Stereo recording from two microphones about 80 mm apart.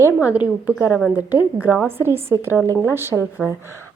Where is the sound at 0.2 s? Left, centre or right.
Centre.